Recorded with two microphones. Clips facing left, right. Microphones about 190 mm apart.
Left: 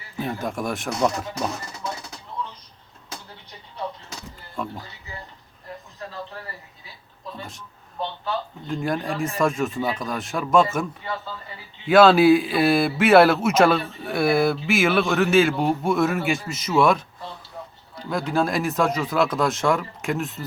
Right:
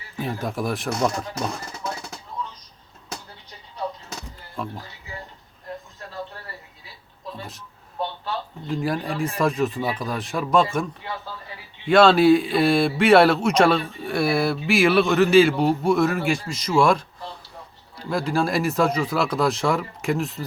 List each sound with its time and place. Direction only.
0.2 s speech: centre (ahead or behind)
4.6 s speech: centre (ahead or behind)
8.6 s speech: centre (ahead or behind)
11.9 s speech: 5° left (ahead or behind)
18.1 s speech: centre (ahead or behind)